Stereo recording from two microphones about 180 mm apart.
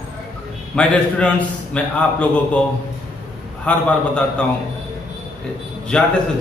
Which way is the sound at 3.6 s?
5° left (ahead or behind).